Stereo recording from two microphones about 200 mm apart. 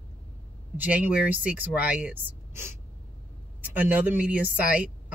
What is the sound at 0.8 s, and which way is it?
Speech, 10° right (ahead or behind).